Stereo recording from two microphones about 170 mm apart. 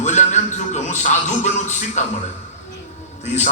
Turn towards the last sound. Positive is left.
turn(degrees=45)  # may be behind; listen again after turning